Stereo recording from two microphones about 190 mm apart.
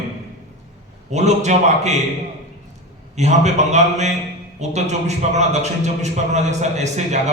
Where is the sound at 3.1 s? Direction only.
35° right (ahead or behind).